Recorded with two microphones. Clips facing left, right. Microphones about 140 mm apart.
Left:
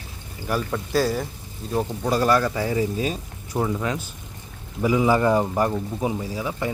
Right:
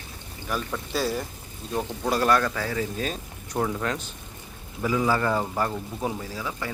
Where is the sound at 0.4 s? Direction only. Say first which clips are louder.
Left 5 dB; 5° left (ahead or behind).